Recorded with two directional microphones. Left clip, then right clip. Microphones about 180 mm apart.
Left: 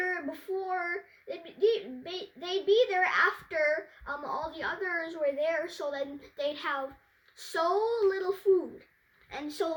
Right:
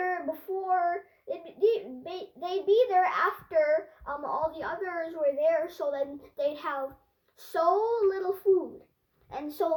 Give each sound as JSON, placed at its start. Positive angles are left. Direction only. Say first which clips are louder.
{"t": 0.0, "sound": "child singing", "louder": "right 2 dB", "side_deg": 20}
{"t": 7.3, "sound": "speech", "louder": "right 3 dB", "side_deg": 15}
{"t": 9.3, "sound": "speech", "louder": "right 3 dB", "side_deg": 15}